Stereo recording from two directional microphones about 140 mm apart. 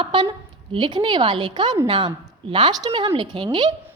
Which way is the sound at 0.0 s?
35° right (ahead or behind).